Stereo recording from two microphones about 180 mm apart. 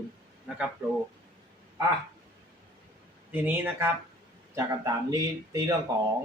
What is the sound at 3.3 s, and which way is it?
Speech, 10° right (ahead or behind).